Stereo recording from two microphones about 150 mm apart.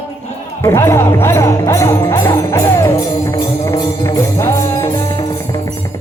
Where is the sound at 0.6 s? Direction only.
15° left (ahead or behind).